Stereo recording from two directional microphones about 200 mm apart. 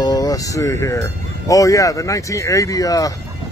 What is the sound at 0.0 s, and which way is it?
Speech, 20° left (ahead or behind).